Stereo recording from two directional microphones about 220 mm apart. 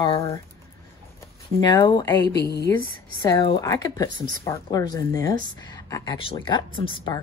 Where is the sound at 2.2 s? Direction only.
50° left (ahead or behind).